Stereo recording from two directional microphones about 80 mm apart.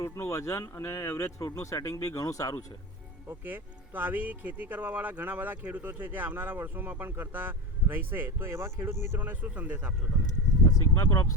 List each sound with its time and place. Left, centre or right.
0.0 s speech: left
3.2 s speech: right
10.7 s speech: left